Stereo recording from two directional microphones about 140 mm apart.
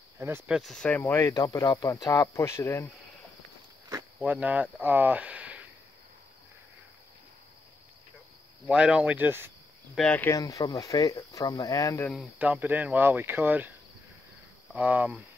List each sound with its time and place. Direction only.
0.5 s speech: centre (ahead or behind); by 2.9 s 20° left (ahead or behind)
4.2 s speech: 10° right (ahead or behind)
8.6 s speech: 5° right (ahead or behind)
9.9 s speech: 10° left (ahead or behind)
10.3 s speech: 25° left (ahead or behind)
12.4 s speech: 10° right (ahead or behind)
14.7 s speech: 10° right (ahead or behind)